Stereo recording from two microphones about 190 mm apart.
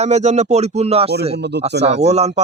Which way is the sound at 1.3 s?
65° right (ahead or behind).